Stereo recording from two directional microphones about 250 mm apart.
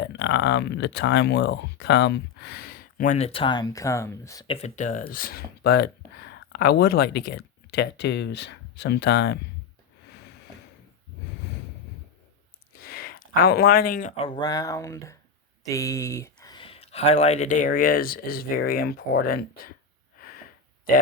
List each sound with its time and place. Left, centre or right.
0.0 s speech: left; by 4.5 s centre
4.5 s speech: left
12.8 s speech: left